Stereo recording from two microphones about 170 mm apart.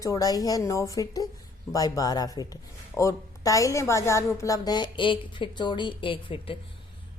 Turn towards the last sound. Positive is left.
turn(degrees=30)  # may be behind; listen again after turning